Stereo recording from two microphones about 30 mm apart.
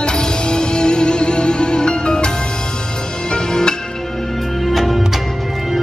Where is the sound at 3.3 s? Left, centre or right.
Left.